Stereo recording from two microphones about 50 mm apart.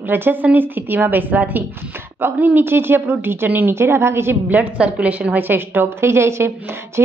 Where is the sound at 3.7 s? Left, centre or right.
Right.